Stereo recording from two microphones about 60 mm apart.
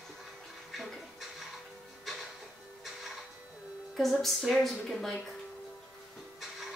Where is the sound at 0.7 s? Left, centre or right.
Centre.